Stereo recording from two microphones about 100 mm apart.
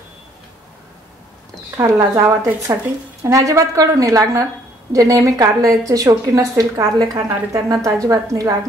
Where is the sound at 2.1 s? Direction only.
30° right (ahead or behind).